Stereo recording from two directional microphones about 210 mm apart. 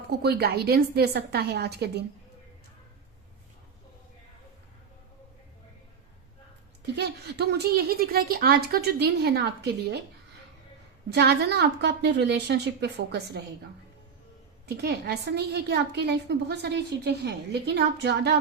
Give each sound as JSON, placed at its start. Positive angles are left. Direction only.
{"t": 0.2, "sound": "a woman's voice", "side_deg": -50}
{"t": 6.9, "sound": "a woman's voice", "side_deg": -50}
{"t": 11.1, "sound": "a woman's voice", "side_deg": -50}
{"t": 14.7, "sound": "a woman's voice", "side_deg": -50}